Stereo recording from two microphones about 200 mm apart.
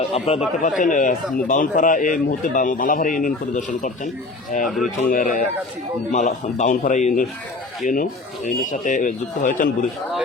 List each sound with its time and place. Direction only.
0.1 s a man's voice: 30° left (ahead or behind)
4.6 s speech: centre (ahead or behind)
5.1 s a man's voice: 40° left (ahead or behind)